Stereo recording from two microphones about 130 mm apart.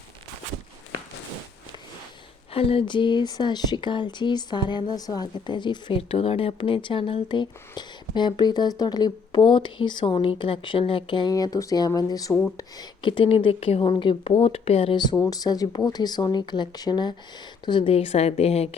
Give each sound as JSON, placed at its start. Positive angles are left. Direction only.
{"t": 2.5, "sound": "speech", "side_deg": 45}
{"t": 12.3, "sound": "speech", "side_deg": 15}
{"t": 12.5, "sound": "speech", "side_deg": 40}
{"t": 15.3, "sound": "speech", "side_deg": 30}